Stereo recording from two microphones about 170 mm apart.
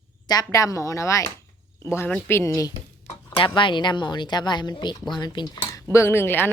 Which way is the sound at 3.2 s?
30° left (ahead or behind).